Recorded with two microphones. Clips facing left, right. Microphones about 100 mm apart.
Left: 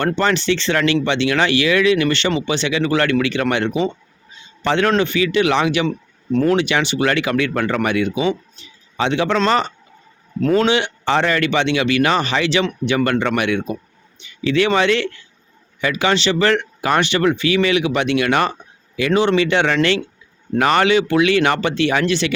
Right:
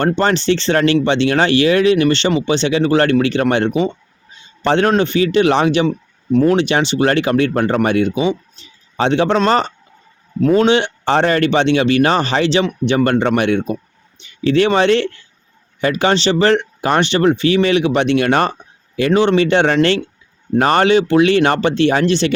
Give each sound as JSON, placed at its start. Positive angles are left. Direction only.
{"t": 0.0, "sound": "speech", "side_deg": -35}
{"t": 8.2, "sound": "speech", "side_deg": -25}
{"t": 9.0, "sound": "speech", "side_deg": -35}